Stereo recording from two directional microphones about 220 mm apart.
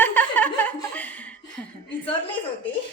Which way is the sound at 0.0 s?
5° left (ahead or behind).